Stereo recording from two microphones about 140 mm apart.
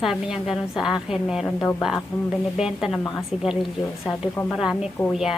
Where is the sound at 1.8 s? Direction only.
Centre (ahead or behind).